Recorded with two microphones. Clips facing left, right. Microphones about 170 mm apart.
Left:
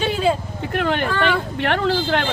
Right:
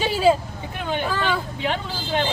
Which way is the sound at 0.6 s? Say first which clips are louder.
Left 6 dB; 70° left (ahead or behind).